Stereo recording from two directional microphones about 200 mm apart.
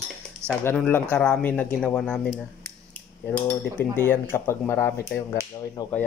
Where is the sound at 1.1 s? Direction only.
5° left (ahead or behind).